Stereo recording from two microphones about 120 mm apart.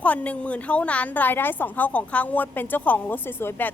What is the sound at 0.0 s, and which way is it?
A woman's voice, 10° left (ahead or behind).